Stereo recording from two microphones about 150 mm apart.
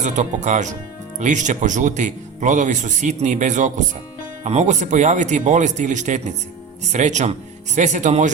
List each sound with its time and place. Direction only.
0.0 s speech: 55° right (ahead or behind)